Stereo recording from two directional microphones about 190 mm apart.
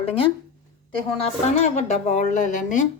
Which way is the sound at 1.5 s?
35° left (ahead or behind).